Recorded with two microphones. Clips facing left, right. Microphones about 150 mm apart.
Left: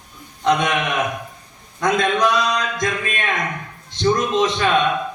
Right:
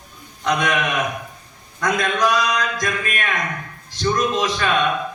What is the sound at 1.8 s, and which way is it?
A man's voice, 25° left (ahead or behind).